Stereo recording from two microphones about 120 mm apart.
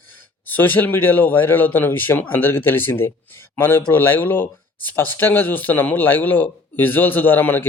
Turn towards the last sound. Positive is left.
turn(degrees=15)  # may be behind; listen again after turning